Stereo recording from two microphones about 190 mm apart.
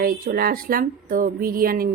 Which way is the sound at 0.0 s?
50° right (ahead or behind).